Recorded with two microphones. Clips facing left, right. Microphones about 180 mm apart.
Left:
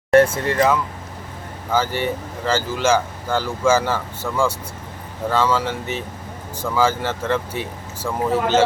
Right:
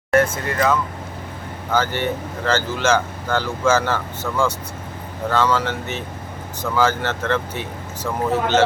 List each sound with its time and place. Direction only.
0.1 s speech: 30° left (ahead or behind)
1.7 s speech: 5° left (ahead or behind)